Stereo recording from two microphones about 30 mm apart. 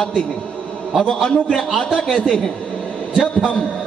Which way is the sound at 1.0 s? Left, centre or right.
Centre.